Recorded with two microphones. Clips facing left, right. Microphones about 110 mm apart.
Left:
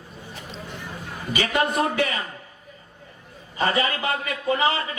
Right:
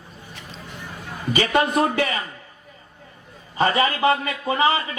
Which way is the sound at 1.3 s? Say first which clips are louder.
Right 4 dB; 35° right (ahead or behind).